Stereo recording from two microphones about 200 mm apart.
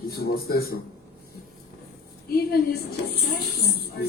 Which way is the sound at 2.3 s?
50° left (ahead or behind).